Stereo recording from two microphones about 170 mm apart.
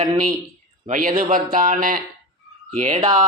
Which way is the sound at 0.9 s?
55° right (ahead or behind).